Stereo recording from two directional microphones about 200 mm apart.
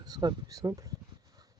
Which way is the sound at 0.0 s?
20° right (ahead or behind).